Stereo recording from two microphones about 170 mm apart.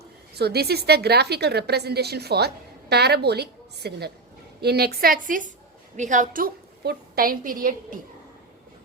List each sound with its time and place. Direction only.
0.3 s a woman's voice: 70° right (ahead or behind); by 7.9 s 55° right (ahead or behind)